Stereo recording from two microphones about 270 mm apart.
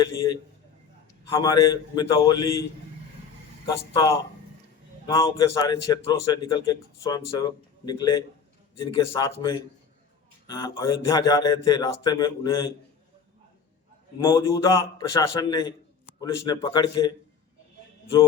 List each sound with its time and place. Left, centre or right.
0.0 s a man's voice: centre
5.0 s a man's voice: centre
14.2 s a man's voice: centre